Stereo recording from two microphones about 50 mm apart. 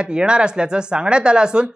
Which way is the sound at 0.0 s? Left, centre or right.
Centre.